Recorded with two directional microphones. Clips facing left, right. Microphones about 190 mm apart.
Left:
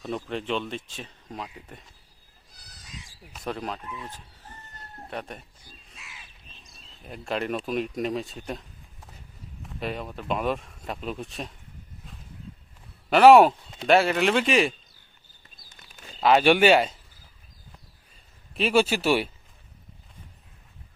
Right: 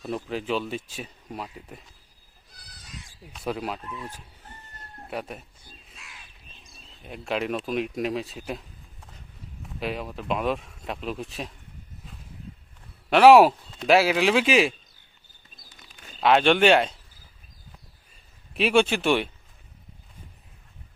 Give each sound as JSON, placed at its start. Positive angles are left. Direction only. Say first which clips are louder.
{"t": 0.0, "sound": "speech", "louder": "right 1 dB", "side_deg": -5}
{"t": 3.3, "sound": "speech", "louder": "right 2 dB", "side_deg": -5}
{"t": 5.1, "sound": "speech", "louder": "right 2 dB", "side_deg": -5}
{"t": 5.9, "sound": "crow", "louder": "left 1 dB", "side_deg": 0}
{"t": 7.0, "sound": "speech", "louder": "right 1 dB", "side_deg": 0}
{"t": 9.6, "sound": "speech", "louder": "right 1 dB", "side_deg": 0}
{"t": 13.1, "sound": "speech", "louder": "even", "side_deg": 0}
{"t": 16.2, "sound": "speech", "louder": "even", "side_deg": 5}
{"t": 18.5, "sound": "speech", "louder": "right 1 dB", "side_deg": 0}